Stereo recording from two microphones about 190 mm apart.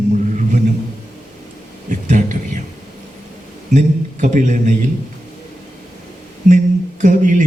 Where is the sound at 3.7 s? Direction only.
40° right (ahead or behind).